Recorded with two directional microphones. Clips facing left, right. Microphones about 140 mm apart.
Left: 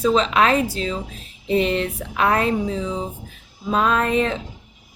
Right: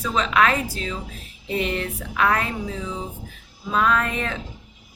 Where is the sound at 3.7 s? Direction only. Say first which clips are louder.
Left 3 dB; 25° left (ahead or behind).